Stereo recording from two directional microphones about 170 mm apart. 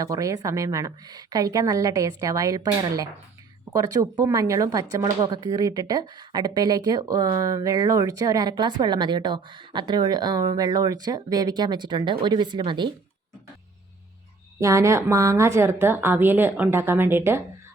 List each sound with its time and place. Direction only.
0.0 s speech: 20° right (ahead or behind)
14.6 s a woman's voice: 15° right (ahead or behind)